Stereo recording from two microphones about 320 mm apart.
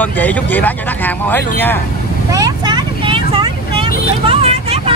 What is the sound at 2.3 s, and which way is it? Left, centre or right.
Vehicle, centre.